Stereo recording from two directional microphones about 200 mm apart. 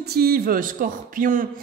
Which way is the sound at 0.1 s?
50° right (ahead or behind).